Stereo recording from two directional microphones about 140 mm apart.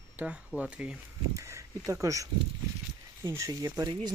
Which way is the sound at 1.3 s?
20° right (ahead or behind).